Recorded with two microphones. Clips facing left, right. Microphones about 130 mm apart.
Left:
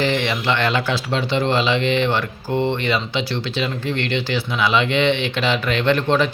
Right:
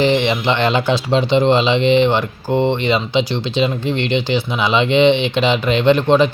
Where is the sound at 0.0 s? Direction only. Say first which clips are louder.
Right 5 dB; 20° right (ahead or behind).